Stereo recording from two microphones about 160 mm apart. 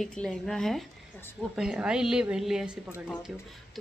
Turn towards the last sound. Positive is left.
turn(degrees=0)  # may be behind; listen again after turning